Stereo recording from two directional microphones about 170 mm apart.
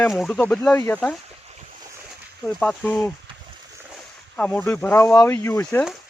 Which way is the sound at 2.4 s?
5° left (ahead or behind).